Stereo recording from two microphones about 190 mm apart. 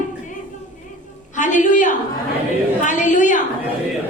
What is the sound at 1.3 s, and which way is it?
A man's voice, 40° left (ahead or behind).